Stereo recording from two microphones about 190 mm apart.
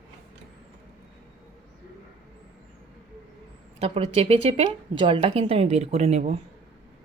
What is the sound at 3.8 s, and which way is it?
A woman's voice, 30° right (ahead or behind).